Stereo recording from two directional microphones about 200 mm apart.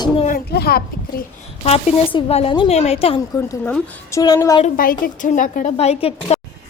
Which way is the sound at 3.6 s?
15° left (ahead or behind).